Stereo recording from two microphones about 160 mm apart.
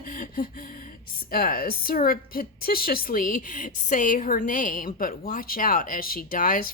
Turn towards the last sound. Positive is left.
turn(degrees=60)  # may be behind; listen again after turning